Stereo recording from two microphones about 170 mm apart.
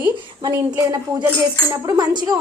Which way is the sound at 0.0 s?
20° right (ahead or behind).